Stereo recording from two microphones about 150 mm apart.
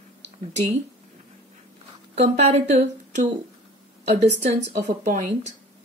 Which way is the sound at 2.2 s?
45° right (ahead or behind).